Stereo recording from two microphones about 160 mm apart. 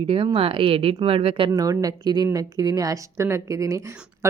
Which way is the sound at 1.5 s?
20° right (ahead or behind).